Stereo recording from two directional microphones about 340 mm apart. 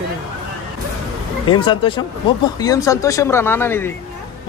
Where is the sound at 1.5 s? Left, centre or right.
Centre.